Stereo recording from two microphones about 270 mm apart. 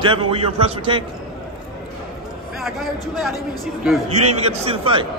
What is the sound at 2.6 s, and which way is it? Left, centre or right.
Speech, centre.